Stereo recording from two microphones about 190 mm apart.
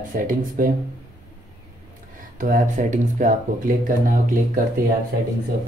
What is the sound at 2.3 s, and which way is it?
Speech, 45° right (ahead or behind).